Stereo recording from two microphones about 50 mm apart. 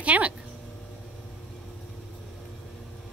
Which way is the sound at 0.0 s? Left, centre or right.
Right.